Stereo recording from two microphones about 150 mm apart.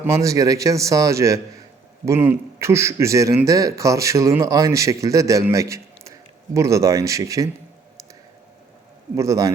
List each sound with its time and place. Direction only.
0.0 s a man's voice: 20° right (ahead or behind)
9.1 s a man's voice: 20° right (ahead or behind)